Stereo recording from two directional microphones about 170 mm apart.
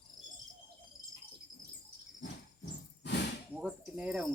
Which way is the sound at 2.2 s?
85° left.